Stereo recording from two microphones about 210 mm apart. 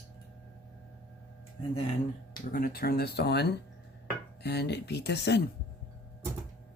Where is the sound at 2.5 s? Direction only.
45° left (ahead or behind).